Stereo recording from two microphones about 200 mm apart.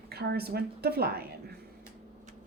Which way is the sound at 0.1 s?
55° right (ahead or behind).